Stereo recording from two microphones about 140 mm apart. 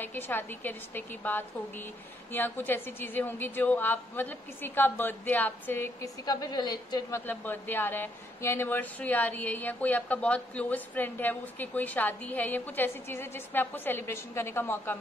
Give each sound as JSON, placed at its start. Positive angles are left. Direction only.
{"t": 0.0, "sound": "a woman's voice", "side_deg": 15}
{"t": 6.2, "sound": "a woman's voice", "side_deg": 30}